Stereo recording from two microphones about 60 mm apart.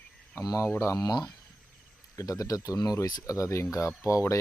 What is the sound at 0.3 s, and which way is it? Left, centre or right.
Speech, left.